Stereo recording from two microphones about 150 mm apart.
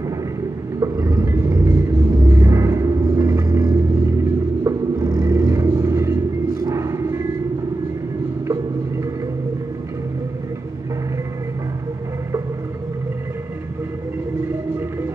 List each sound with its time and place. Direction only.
0.7 s vehicle: 25° right (ahead or behind)
2.2 s music: 20° right (ahead or behind)
4.6 s vehicle: 20° right (ahead or behind)